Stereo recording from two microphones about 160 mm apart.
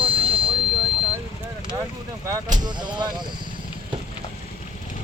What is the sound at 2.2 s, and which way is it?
Speech, 25° right (ahead or behind).